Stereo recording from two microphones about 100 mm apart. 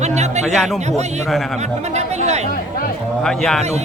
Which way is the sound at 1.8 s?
90° right.